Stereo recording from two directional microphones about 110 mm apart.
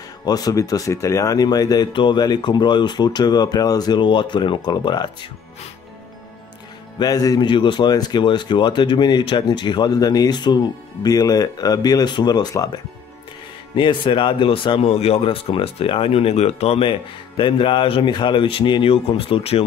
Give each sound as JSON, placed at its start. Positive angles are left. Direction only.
{"t": 0.2, "sound": "speech", "side_deg": 35}
{"t": 7.0, "sound": "speech", "side_deg": 35}
{"t": 13.7, "sound": "speech", "side_deg": 50}
{"t": 14.9, "sound": "speech", "side_deg": 65}
{"t": 17.4, "sound": "speech", "side_deg": 50}